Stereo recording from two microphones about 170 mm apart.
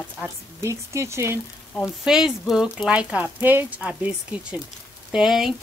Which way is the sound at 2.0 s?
5° right (ahead or behind).